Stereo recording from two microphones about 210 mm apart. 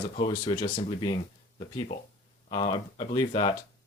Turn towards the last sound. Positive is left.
turn(degrees=20)  # may be behind; listen again after turning